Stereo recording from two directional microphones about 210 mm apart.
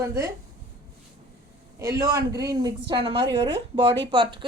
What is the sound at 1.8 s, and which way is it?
A woman's voice, 15° right (ahead or behind).